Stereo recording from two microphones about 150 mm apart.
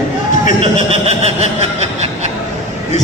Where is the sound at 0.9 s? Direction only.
45° right (ahead or behind).